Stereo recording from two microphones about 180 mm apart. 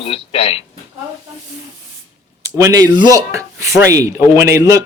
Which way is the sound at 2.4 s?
15° right (ahead or behind).